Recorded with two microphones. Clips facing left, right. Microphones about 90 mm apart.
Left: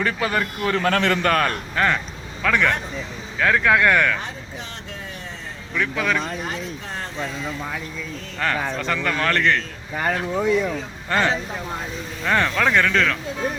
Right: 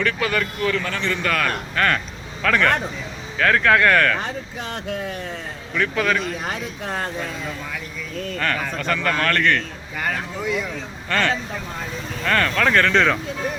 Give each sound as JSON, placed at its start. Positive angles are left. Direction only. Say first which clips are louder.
{"t": 0.0, "sound": "speech", "louder": "even", "side_deg": 25}
{"t": 0.8, "sound": "a man's voice", "louder": "left 5 dB", "side_deg": 60}
{"t": 1.2, "sound": "a man's voice", "louder": "left 3 dB", "side_deg": 40}
{"t": 1.7, "sound": "a man's voice", "louder": "even", "side_deg": 15}
{"t": 5.7, "sound": "speech", "louder": "right 2 dB", "side_deg": 5}
{"t": 6.5, "sound": "speech", "louder": "right 3 dB", "side_deg": -55}
{"t": 8.4, "sound": "speech", "louder": "left 2 dB", "side_deg": 20}
{"t": 12.2, "sound": "speech", "louder": "even", "side_deg": 10}